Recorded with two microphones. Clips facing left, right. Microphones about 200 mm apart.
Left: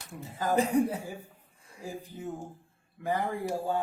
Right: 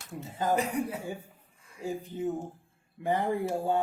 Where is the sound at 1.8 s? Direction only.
25° right (ahead or behind).